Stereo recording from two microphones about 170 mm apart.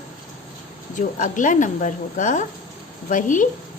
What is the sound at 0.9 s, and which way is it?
Speech, 50° left (ahead or behind).